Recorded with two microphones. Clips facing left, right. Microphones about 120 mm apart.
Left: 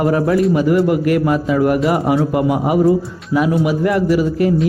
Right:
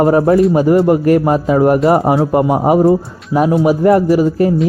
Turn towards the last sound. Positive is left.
turn(degrees=-35)  # may be behind; listen again after turning